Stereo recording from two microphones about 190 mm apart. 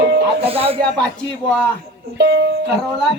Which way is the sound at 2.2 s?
65° right (ahead or behind).